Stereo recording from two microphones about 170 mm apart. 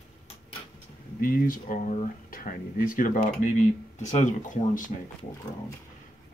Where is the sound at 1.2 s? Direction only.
55° left (ahead or behind).